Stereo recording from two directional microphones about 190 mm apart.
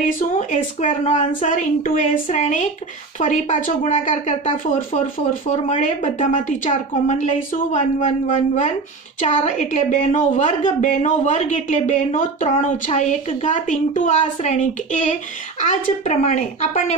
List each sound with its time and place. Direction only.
0.0 s a woman's voice: 40° left (ahead or behind)